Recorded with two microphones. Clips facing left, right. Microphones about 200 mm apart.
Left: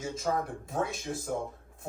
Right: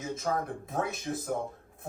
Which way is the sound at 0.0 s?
55° right (ahead or behind).